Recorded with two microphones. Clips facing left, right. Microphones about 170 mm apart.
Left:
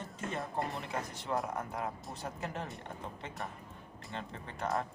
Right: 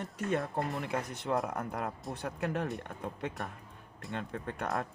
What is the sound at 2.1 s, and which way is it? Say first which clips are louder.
Speech: right 5 dB; 60° right (ahead or behind).